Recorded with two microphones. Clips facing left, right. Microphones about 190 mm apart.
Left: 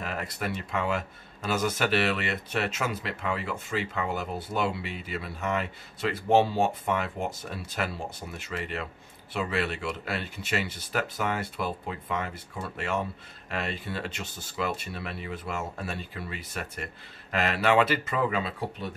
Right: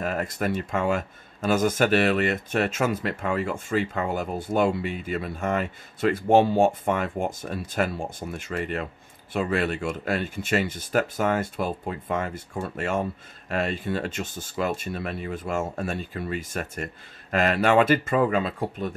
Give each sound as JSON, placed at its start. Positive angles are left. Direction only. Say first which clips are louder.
{"t": 0.0, "sound": "speech", "louder": "right 6 dB", "side_deg": -45}